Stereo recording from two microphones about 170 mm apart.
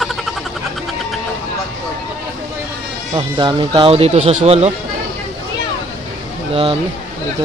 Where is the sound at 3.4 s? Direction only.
25° right (ahead or behind).